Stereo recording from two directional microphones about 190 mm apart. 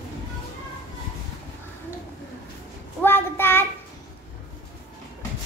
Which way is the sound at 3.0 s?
10° left (ahead or behind).